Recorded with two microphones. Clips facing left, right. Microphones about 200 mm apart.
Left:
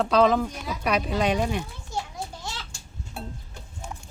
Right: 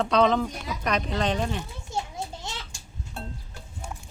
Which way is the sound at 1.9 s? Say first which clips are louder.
Right 2 dB; 25° right (ahead or behind).